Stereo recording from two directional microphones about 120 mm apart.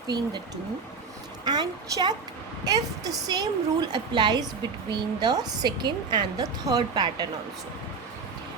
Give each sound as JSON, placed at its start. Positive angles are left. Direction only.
{"t": 0.1, "sound": "a woman's voice", "side_deg": -35}